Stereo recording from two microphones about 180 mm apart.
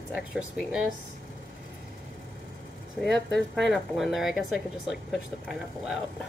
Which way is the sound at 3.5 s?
Centre (ahead or behind).